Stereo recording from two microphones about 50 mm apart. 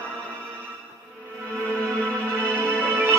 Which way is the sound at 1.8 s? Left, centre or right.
Left.